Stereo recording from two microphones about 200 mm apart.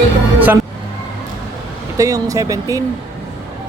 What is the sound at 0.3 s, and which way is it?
Speech, 10° right (ahead or behind).